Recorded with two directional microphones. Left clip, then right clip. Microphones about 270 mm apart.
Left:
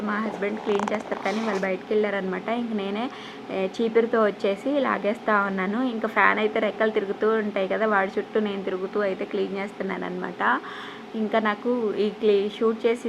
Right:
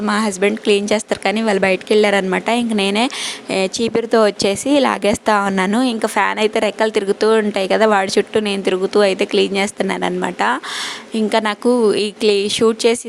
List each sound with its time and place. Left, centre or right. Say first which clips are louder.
0.0 s speech: right 10 dB; right